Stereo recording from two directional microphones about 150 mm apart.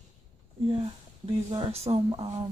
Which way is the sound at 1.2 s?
35° right (ahead or behind).